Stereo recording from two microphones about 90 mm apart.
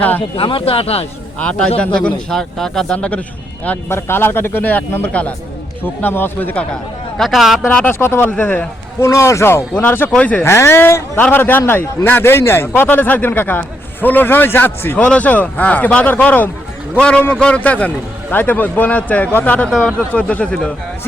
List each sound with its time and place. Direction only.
0.3 s speech: 80° left
1.4 s a man's voice: 10° left (ahead or behind)
3.8 s a man's voice: 25° left (ahead or behind)
7.2 s speech: centre (ahead or behind)
7.7 s a man's voice: 15° left (ahead or behind)
7.9 s a man's voice: 30° left (ahead or behind)
9.0 s a man's voice: 30° left (ahead or behind); by 10.4 s 15° left (ahead or behind)
10.4 s a man's voice: 30° left (ahead or behind); by 20.7 s 10° left (ahead or behind)